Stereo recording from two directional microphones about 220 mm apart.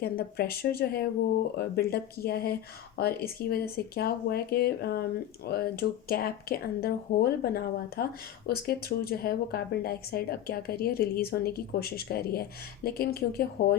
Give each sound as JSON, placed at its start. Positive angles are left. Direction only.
{"t": 0.0, "sound": "speech", "side_deg": 45}